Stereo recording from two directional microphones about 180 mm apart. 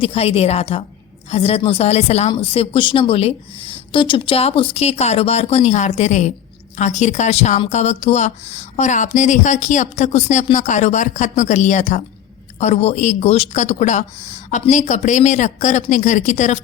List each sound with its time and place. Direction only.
0.0 s speech: 35° left (ahead or behind)